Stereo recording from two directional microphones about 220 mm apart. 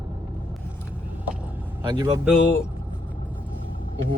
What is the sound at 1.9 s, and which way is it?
Speech, 20° right (ahead or behind).